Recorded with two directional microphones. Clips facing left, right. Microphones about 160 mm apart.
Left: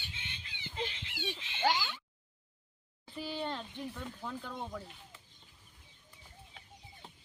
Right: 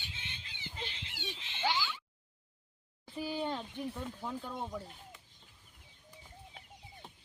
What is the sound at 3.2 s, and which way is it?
Speech, 15° right (ahead or behind).